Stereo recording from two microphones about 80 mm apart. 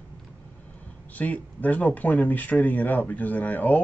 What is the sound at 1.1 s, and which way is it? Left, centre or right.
Speech, centre.